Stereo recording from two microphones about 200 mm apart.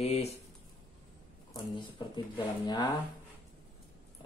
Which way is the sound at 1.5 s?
25° left (ahead or behind).